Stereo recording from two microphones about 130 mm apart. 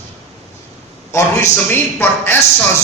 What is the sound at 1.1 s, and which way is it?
A man's voice, 20° left (ahead or behind).